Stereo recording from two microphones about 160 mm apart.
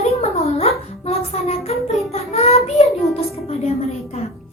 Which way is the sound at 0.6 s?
40° left (ahead or behind).